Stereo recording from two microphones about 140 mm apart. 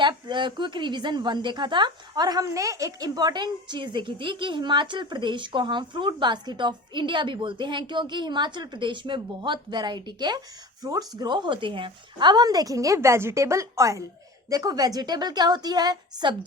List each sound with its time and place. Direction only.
0.0 s a woman's voice: 35° right (ahead or behind)